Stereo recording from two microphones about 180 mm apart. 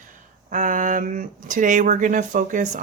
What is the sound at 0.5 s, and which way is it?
Speech, 45° right (ahead or behind).